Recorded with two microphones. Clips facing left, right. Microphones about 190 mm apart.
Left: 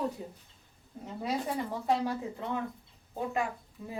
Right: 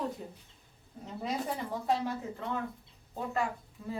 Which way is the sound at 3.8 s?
15° left (ahead or behind).